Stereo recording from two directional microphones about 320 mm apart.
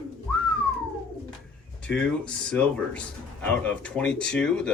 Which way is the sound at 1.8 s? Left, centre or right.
Centre.